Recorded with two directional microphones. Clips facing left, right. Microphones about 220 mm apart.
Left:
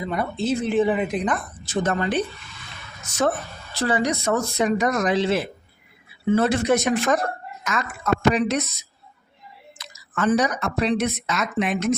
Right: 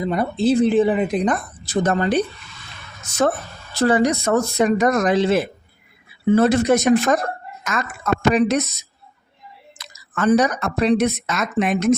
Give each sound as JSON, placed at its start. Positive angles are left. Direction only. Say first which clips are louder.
{"t": 0.0, "sound": "speech", "louder": "right 6 dB", "side_deg": -35}
{"t": 3.8, "sound": "speech", "louder": "right 6 dB", "side_deg": -45}
{"t": 9.7, "sound": "speech", "louder": "right 1 dB", "side_deg": -45}